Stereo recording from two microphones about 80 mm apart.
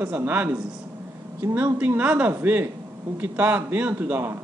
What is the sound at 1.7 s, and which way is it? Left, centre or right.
A man's voice, centre.